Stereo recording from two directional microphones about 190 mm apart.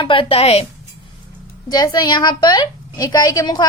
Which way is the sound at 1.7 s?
20° left (ahead or behind).